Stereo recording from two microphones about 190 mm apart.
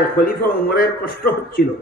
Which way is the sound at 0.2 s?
50° left (ahead or behind).